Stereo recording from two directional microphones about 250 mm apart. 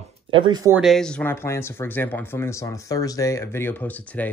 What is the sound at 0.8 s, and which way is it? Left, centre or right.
Speech, centre.